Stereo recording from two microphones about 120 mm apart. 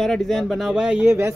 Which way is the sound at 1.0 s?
20° right (ahead or behind).